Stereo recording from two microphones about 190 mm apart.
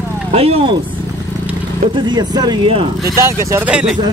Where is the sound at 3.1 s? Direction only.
15° right (ahead or behind).